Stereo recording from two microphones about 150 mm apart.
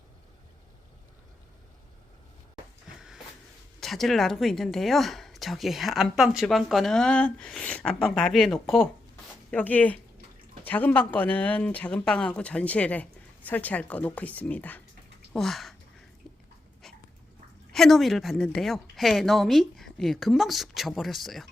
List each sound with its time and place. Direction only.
3.8 s speech: centre (ahead or behind)
9.5 s speech: 10° left (ahead or behind)
16.8 s dog: centre (ahead or behind)
17.7 s speech: centre (ahead or behind)